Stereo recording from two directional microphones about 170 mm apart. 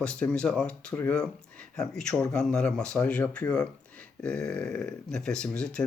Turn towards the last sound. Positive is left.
turn(degrees=5)  # may be behind; listen again after turning